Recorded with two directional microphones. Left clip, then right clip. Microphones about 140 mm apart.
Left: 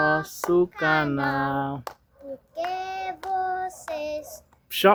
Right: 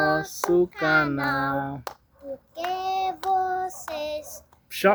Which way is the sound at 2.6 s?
15° right (ahead or behind).